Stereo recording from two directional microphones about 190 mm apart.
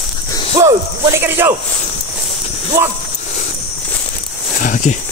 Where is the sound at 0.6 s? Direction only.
15° right (ahead or behind).